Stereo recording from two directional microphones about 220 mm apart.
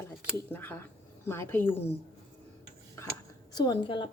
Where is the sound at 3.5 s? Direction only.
20° left (ahead or behind).